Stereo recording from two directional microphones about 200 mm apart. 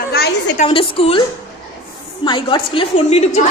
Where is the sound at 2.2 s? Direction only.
25° left (ahead or behind).